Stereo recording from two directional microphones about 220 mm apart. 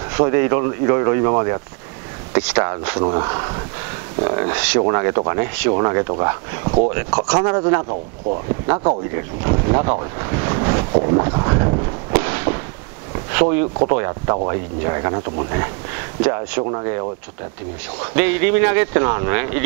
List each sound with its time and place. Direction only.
0.1 s speech: 15° right (ahead or behind)
4.5 s speech: 10° right (ahead or behind)
10.1 s boat: 15° right (ahead or behind)
12.1 s fireworks: 10° right (ahead or behind)
13.1 s a sound: 15° right (ahead or behind)
13.8 s speech: 20° right (ahead or behind)
16.7 s speech: 25° right (ahead or behind)
18.1 s speech: 10° right (ahead or behind)